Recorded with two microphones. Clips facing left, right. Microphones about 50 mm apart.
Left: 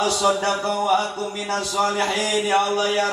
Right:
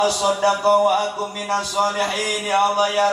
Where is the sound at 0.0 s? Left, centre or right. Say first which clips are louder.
Right 2 dB; right.